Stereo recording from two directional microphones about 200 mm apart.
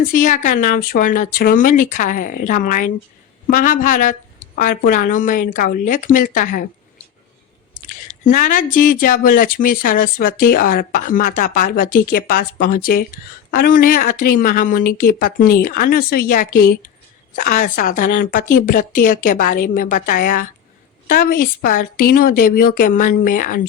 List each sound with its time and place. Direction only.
0.0 s speech: 40° left (ahead or behind)
8.2 s speech: 40° left (ahead or behind)